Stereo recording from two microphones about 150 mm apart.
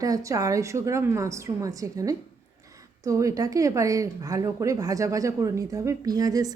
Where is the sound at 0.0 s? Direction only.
20° right (ahead or behind).